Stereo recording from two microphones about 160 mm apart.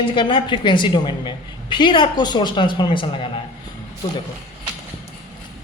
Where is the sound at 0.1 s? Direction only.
30° left (ahead or behind).